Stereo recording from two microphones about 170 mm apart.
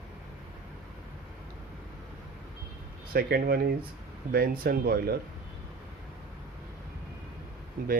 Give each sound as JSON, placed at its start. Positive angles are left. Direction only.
{"t": 3.1, "sound": "speech", "side_deg": -65}